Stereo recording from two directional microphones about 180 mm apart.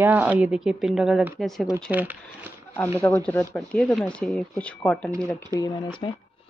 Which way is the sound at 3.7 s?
5° left (ahead or behind).